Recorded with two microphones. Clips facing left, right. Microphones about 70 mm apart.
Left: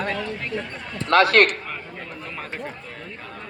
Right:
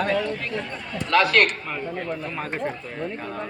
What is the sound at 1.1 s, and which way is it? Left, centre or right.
Speech, left.